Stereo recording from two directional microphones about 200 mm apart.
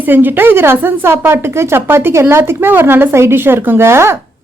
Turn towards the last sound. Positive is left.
turn(degrees=-15)  # may be behind; listen again after turning